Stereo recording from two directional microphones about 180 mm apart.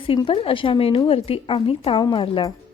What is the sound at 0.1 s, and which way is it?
A woman's voice, 30° left (ahead or behind).